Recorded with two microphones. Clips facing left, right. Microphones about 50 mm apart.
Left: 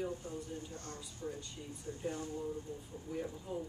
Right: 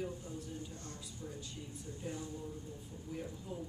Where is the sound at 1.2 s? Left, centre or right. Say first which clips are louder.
Left 5 dB; left.